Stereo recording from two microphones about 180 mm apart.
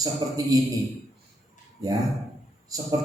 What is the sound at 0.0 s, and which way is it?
Speech, 20° right (ahead or behind).